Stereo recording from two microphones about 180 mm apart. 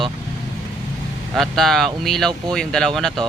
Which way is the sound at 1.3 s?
Centre (ahead or behind).